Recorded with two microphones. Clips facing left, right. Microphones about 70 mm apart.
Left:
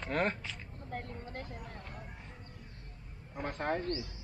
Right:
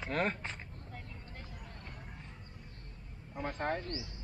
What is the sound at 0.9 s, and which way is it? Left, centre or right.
Vehicle, left.